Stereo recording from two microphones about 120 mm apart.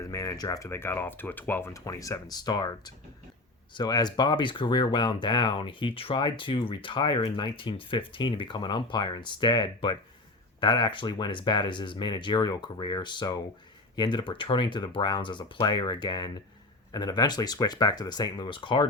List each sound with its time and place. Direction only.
0.0 s speech: 25° left (ahead or behind)